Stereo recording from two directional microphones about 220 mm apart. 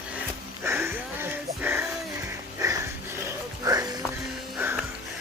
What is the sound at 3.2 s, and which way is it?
Music, 15° right (ahead or behind).